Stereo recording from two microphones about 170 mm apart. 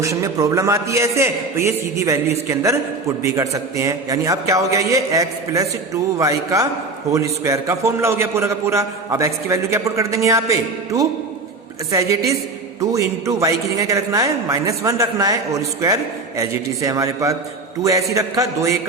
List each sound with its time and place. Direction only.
0.0 s a man's voice: 20° right (ahead or behind)